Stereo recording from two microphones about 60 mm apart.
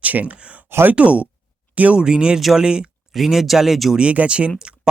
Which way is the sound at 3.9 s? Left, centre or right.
Centre.